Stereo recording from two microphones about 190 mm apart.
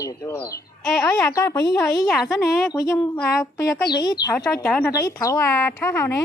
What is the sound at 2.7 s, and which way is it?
A woman's voice, 20° left (ahead or behind).